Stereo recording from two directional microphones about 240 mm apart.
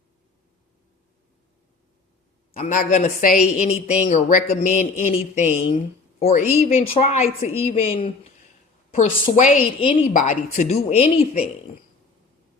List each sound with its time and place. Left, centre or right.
2.5 s a woman's voice: left